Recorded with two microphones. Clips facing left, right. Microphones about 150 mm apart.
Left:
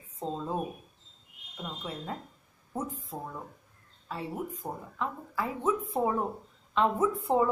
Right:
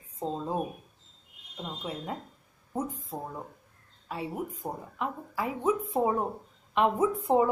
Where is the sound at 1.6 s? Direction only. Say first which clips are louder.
Right 2 dB; 20° right (ahead or behind).